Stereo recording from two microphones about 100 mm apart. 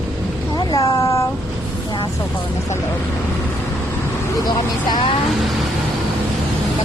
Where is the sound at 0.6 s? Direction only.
45° left (ahead or behind).